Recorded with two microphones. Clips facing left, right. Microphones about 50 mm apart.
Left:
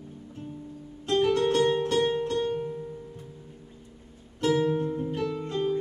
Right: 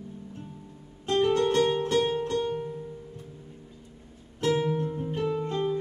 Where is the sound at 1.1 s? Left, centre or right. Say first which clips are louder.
Even; centre.